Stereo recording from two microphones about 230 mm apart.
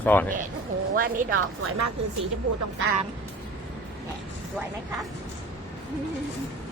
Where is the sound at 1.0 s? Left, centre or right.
Right.